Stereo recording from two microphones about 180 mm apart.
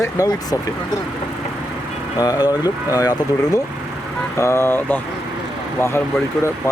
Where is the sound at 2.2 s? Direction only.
20° left (ahead or behind).